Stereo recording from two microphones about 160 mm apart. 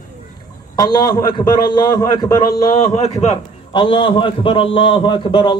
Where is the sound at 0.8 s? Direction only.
25° left (ahead or behind).